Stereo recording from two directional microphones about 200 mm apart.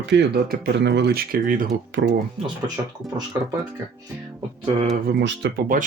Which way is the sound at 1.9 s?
60° right (ahead or behind).